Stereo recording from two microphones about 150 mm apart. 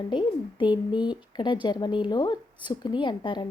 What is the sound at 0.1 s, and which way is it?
Speech, 30° left (ahead or behind).